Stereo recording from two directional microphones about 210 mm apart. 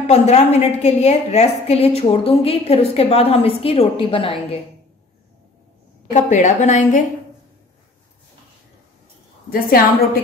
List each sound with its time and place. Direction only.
0.0 s a woman's voice: 30° left (ahead or behind)
6.1 s a woman's voice: 35° left (ahead or behind)
9.5 s a woman's voice: 45° left (ahead or behind)